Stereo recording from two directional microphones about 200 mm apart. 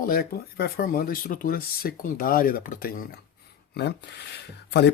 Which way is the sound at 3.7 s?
55° left (ahead or behind).